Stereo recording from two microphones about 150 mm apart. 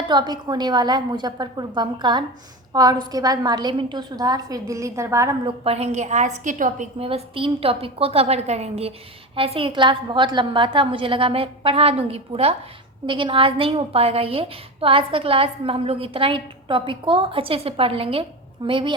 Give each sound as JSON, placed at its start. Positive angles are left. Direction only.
{"t": 0.1, "sound": "a woman's voice", "side_deg": -30}
{"t": 5.5, "sound": "a woman's voice", "side_deg": -45}
{"t": 7.0, "sound": "a woman's voice", "side_deg": -35}